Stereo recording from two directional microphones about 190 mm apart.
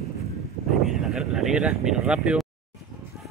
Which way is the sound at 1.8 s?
5° right (ahead or behind).